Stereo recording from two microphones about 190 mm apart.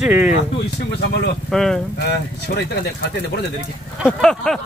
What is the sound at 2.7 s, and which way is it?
Speech, 55° left (ahead or behind).